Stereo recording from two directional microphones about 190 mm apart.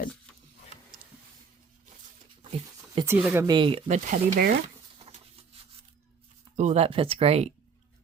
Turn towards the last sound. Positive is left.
turn(degrees=-30)  # may be behind; listen again after turning